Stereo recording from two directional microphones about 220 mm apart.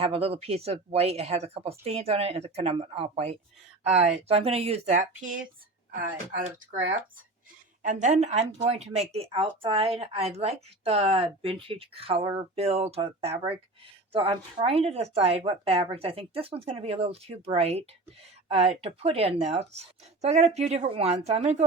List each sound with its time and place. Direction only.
0.0 s a woman's voice: 25° right (ahead or behind)
7.8 s a woman's voice: 35° right (ahead or behind)